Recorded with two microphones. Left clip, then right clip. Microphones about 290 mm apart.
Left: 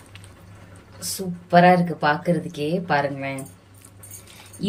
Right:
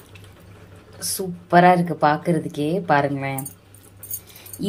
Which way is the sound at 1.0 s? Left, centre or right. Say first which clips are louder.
Right 3 dB; centre.